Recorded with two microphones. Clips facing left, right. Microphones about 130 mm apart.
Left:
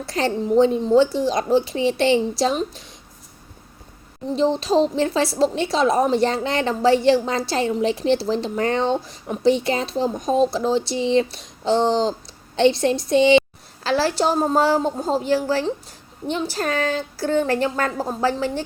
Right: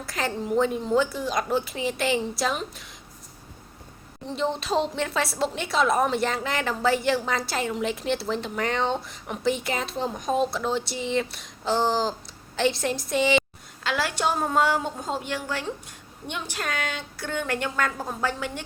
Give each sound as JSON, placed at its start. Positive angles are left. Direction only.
{"t": 0.0, "sound": "a woman's voice", "side_deg": 30}
{"t": 4.4, "sound": "a woman's voice", "side_deg": 25}